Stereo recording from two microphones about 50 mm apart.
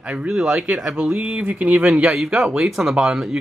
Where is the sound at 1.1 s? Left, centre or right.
Right.